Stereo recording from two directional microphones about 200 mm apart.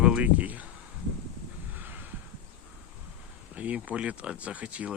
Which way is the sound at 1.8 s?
10° right (ahead or behind).